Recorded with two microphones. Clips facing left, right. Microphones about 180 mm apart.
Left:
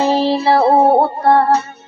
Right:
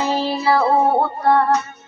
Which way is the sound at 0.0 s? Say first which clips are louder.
Left 5 dB; 30° left (ahead or behind).